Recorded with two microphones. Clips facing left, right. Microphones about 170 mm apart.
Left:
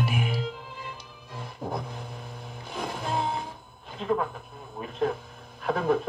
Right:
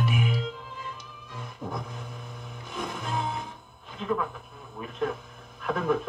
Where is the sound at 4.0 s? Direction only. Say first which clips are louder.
Left 2 dB; 35° left (ahead or behind).